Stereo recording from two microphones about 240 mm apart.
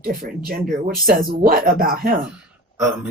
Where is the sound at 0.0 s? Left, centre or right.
Right.